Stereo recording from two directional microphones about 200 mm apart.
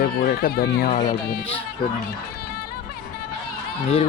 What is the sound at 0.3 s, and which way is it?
Speech, 50° left (ahead or behind).